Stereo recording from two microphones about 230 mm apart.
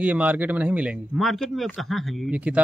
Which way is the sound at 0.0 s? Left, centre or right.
Centre.